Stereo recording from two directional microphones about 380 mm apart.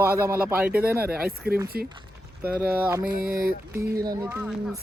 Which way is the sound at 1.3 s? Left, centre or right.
Right.